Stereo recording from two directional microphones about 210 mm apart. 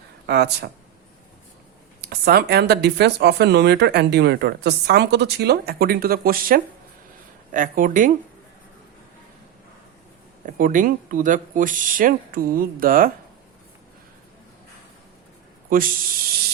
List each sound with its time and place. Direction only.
0.3 s speech: 50° right (ahead or behind)
2.0 s speech: 50° right (ahead or behind)
10.4 s speech: 40° right (ahead or behind)
15.7 s speech: 40° right (ahead or behind)